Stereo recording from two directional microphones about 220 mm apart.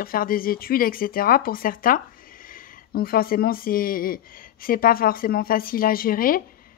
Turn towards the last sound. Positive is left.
turn(degrees=40)  # may be behind; listen again after turning